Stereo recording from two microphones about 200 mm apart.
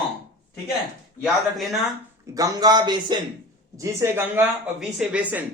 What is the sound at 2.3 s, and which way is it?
Speech, 20° right (ahead or behind).